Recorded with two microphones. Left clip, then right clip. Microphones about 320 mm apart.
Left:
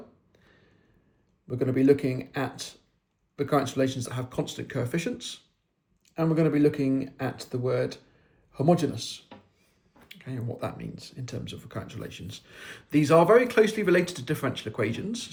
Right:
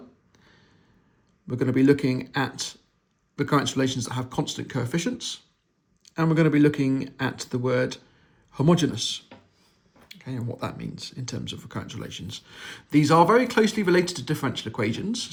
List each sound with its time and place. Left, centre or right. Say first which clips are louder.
1.5 s speech: right 1 dB; centre